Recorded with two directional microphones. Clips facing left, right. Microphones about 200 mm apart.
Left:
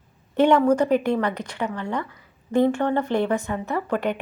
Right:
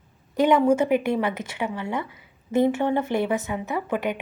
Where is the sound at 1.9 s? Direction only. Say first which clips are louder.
Left 1 dB; 20° right (ahead or behind).